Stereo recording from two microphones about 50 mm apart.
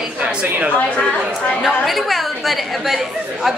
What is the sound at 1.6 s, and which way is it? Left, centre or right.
Speech, centre.